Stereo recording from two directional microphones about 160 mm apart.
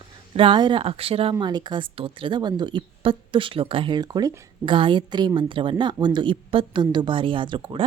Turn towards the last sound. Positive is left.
turn(degrees=-30)  # may be behind; listen again after turning